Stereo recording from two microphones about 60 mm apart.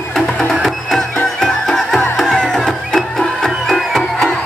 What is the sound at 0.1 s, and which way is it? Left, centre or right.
Music, centre.